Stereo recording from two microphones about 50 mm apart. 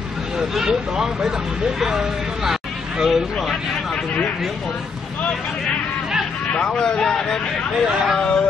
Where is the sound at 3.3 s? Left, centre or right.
Centre.